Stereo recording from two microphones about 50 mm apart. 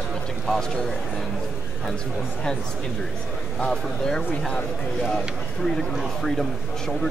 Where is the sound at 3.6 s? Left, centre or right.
Centre.